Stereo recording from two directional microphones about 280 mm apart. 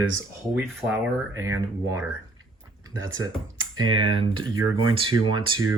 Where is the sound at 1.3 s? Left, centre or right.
Centre.